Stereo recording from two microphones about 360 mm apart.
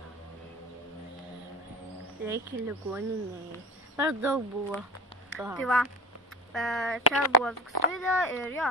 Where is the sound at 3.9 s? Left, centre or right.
Centre.